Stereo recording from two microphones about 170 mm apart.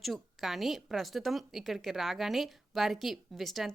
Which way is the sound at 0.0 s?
Centre (ahead or behind).